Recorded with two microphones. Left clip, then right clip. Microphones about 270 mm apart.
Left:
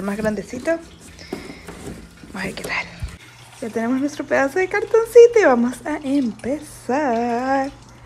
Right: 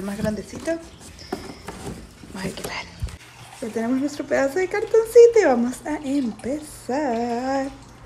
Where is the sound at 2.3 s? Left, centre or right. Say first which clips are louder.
Left 6 dB; centre.